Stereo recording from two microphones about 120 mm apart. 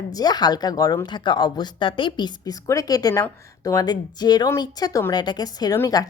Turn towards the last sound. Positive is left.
turn(degrees=30)  # may be behind; listen again after turning